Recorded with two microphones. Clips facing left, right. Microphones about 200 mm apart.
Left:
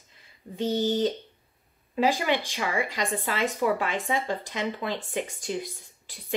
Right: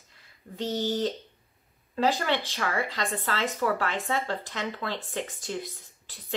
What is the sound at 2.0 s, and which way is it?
Speech, 15° left (ahead or behind).